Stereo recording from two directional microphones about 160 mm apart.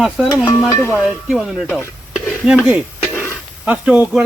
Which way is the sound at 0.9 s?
5° right (ahead or behind).